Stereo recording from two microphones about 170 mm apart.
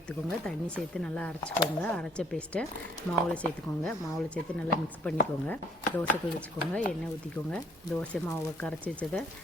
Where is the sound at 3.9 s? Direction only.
5° left (ahead or behind).